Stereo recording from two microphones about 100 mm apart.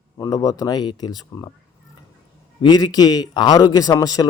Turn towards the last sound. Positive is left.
turn(degrees=40)  # may be behind; listen again after turning